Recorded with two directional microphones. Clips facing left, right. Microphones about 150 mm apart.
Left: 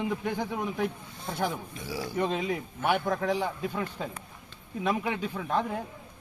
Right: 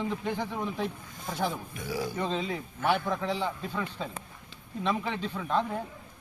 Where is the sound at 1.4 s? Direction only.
25° left (ahead or behind).